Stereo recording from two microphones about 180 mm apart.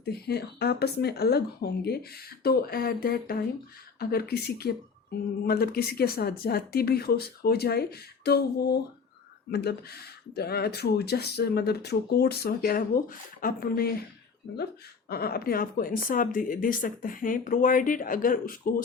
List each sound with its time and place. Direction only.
0.0 s speech: 60° left (ahead or behind)
15.1 s speech: 60° left (ahead or behind)